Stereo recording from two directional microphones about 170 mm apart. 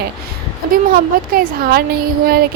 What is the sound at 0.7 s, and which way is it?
A woman's voice, 60° right (ahead or behind).